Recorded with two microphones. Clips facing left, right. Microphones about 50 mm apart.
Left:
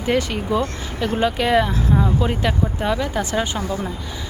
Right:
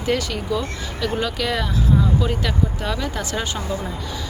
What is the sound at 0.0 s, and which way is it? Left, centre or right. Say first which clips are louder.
Speech: left 2 dB; left.